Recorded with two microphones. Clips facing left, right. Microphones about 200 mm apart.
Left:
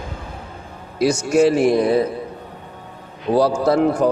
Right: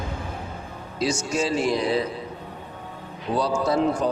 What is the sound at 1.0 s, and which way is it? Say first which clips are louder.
A man's voice: left 9 dB; 60° left (ahead or behind).